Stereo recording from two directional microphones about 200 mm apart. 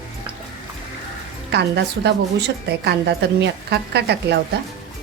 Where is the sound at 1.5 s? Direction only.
60° right (ahead or behind).